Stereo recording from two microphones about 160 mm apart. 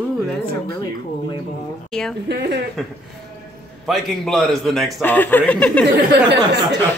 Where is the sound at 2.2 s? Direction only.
90° right.